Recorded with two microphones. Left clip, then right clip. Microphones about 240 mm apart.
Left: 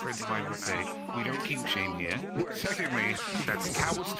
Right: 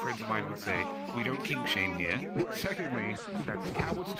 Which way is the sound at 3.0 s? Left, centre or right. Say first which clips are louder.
Left 6 dB; left.